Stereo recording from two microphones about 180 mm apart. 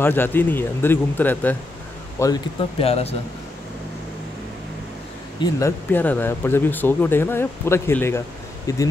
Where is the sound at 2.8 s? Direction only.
35° left (ahead or behind).